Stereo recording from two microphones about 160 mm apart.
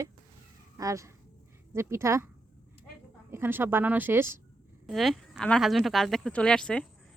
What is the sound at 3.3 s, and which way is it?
Speech, 15° right (ahead or behind).